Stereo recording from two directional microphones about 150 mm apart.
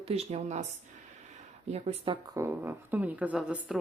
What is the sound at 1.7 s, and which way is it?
Speech, 45° right (ahead or behind).